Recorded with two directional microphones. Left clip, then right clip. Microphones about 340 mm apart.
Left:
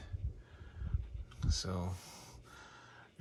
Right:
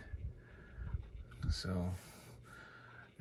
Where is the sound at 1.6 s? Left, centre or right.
Centre.